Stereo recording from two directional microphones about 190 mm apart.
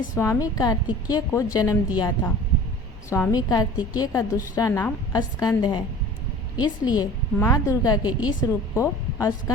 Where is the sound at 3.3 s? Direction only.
20° left (ahead or behind).